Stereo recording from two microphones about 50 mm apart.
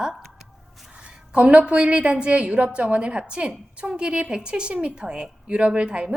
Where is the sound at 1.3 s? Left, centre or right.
Right.